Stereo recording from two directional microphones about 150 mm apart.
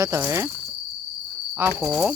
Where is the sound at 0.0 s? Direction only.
15° right (ahead or behind).